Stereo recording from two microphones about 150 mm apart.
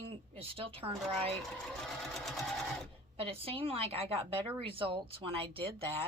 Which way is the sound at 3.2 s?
40° right (ahead or behind).